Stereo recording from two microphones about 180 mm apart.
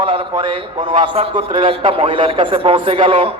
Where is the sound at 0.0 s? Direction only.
30° right (ahead or behind).